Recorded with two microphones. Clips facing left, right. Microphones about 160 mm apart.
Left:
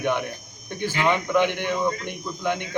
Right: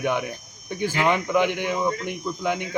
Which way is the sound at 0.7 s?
10° right (ahead or behind).